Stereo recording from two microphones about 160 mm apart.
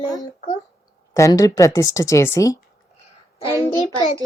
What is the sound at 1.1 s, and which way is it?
Speech, 20° left (ahead or behind).